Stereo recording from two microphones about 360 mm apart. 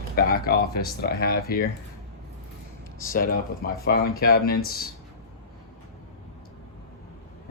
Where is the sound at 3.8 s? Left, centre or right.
Left.